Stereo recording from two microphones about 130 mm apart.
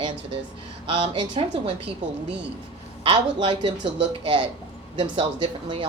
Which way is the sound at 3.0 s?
45° right (ahead or behind).